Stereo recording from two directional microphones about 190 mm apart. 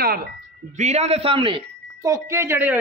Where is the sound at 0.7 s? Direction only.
40° right (ahead or behind); by 2.7 s 15° right (ahead or behind).